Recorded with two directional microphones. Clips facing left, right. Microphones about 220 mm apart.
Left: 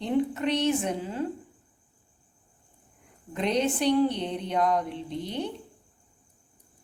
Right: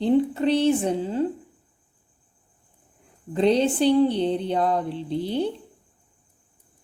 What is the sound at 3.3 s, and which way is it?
A woman's voice, 30° right (ahead or behind).